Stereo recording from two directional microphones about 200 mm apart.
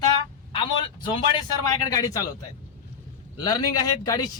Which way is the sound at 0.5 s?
25° left (ahead or behind).